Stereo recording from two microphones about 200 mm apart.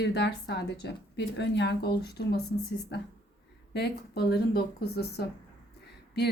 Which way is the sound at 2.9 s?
55° left (ahead or behind).